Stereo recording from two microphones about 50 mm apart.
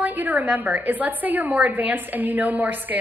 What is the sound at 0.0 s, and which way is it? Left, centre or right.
A woman's voice, right.